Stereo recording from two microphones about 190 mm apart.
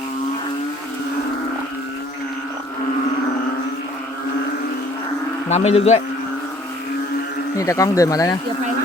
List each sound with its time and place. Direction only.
5.5 s cattle: 35° left (ahead or behind)
7.5 s speech: 15° left (ahead or behind)